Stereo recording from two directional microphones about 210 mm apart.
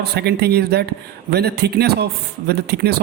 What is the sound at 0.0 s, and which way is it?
Speech, 50° right (ahead or behind).